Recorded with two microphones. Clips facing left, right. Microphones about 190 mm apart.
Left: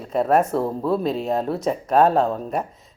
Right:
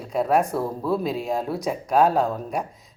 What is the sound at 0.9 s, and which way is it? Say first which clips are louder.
Speech: left 2 dB; 10° right (ahead or behind).